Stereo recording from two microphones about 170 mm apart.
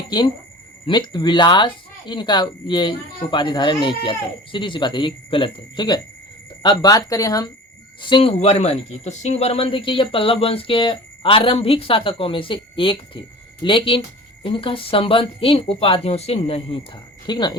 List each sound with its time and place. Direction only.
0.9 s speech: 25° left (ahead or behind)
8.0 s speech: 30° left (ahead or behind)